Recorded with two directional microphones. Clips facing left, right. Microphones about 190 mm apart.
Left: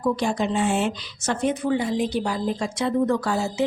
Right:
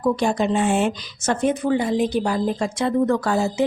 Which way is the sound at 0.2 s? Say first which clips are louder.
Right 3 dB; 55° right (ahead or behind).